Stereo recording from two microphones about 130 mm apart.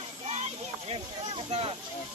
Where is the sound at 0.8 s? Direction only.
45° right (ahead or behind).